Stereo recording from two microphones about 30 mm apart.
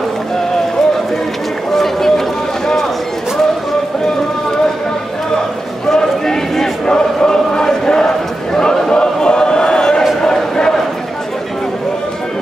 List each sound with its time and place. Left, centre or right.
1.7 s run: centre
5.9 s a sound: centre
6.9 s choir: left
8.5 s chant: centre
8.9 s choir: left
10.2 s a sound: left